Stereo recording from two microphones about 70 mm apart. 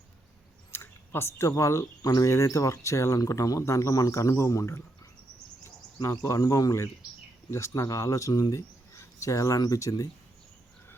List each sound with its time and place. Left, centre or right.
0.7 s speech: left
6.0 s speech: left